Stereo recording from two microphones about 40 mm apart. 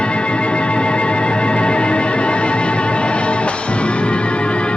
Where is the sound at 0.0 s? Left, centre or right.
Left.